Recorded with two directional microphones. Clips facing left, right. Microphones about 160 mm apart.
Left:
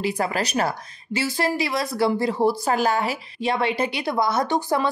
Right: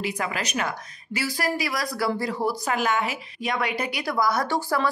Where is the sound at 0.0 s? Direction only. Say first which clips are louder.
Left 5 dB; 35° left (ahead or behind).